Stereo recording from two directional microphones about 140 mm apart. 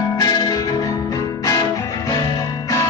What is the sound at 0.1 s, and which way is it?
Music, 25° left (ahead or behind).